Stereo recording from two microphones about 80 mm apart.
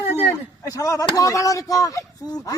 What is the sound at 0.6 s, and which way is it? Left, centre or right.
Speech, left.